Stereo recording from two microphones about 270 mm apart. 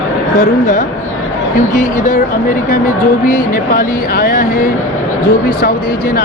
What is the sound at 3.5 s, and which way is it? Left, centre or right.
Speech, left.